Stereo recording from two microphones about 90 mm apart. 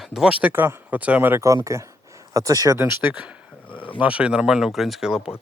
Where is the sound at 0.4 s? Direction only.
20° right (ahead or behind).